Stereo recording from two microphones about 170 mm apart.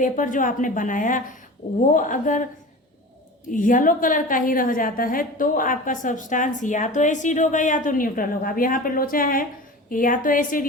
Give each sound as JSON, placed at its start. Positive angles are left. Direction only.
{"t": 0.0, "sound": "a woman's voice", "side_deg": 50}
{"t": 3.5, "sound": "a woman's voice", "side_deg": 50}